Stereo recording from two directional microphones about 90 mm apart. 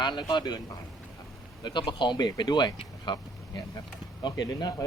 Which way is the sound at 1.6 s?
60° left (ahead or behind).